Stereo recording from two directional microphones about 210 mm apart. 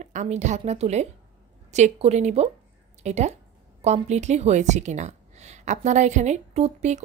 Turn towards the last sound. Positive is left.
turn(degrees=-30)  # may be behind; listen again after turning